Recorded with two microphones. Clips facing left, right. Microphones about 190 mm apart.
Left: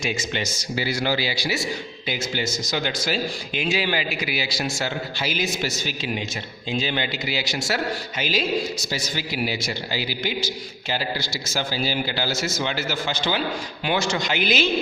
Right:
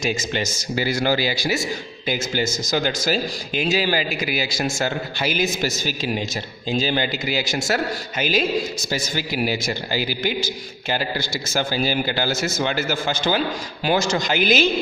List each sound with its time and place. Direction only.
0.0 s a man's voice: 40° right (ahead or behind)